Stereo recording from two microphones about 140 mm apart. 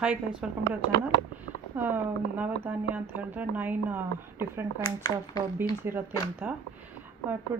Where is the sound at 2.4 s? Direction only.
10° right (ahead or behind).